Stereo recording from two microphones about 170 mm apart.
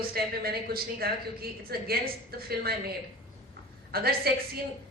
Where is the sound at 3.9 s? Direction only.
60° right (ahead or behind).